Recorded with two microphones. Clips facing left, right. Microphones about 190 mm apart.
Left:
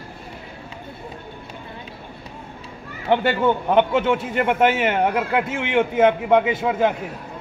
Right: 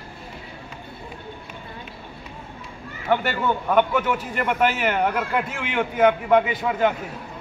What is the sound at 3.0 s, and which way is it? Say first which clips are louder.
A man's voice: left 4 dB; 20° left (ahead or behind).